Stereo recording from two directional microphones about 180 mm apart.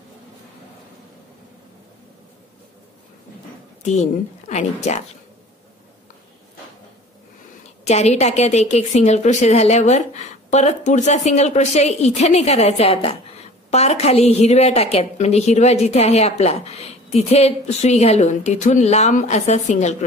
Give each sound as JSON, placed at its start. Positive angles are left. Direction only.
{"t": 3.8, "sound": "a woman's voice", "side_deg": 40}
{"t": 7.8, "sound": "a woman's voice", "side_deg": 35}